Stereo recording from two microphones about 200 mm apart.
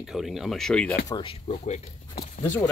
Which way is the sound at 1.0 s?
25° left (ahead or behind).